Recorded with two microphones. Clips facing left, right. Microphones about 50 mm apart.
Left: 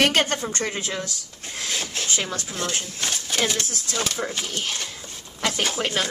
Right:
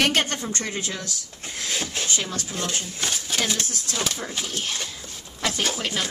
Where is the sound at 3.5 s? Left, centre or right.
Centre.